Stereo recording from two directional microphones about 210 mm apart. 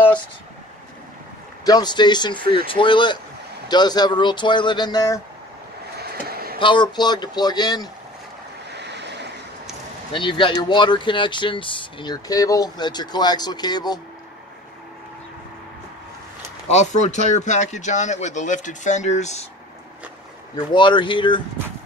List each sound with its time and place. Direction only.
1.6 s speech: 20° left (ahead or behind)
5.9 s a sound: 50° right (ahead or behind)
6.6 s speech: 20° left (ahead or behind)
8.7 s waves: 55° right (ahead or behind)
10.1 s speech: 25° left (ahead or behind)
16.6 s speech: 35° left (ahead or behind)
20.5 s speech: 20° left (ahead or behind)